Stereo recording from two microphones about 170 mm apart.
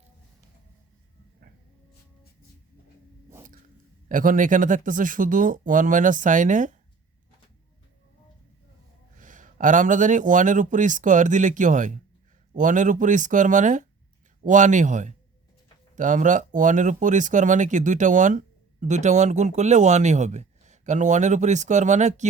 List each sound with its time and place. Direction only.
4.1 s speech: 50° right (ahead or behind)
9.1 s speech: 50° right (ahead or behind)